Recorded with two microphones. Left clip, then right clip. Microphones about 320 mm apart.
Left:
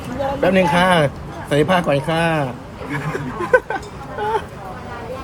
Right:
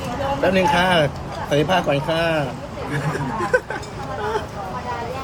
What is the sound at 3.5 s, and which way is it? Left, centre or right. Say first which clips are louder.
Speech: left 6 dB; centre.